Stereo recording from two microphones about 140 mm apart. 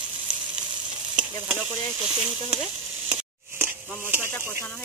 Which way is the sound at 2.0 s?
5° right (ahead or behind).